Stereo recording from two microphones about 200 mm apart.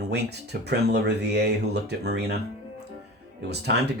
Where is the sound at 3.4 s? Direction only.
55° right (ahead or behind).